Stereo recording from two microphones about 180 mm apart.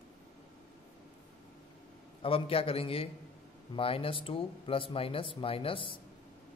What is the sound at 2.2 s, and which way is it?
Speech, 30° left (ahead or behind).